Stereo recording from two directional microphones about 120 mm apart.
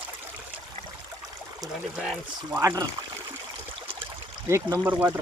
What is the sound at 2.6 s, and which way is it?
Speech, 25° right (ahead or behind).